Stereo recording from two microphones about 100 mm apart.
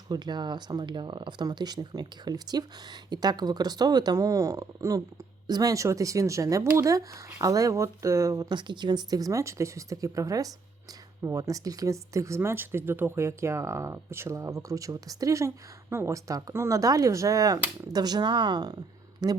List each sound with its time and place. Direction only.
0.1 s speech: 45° right (ahead or behind)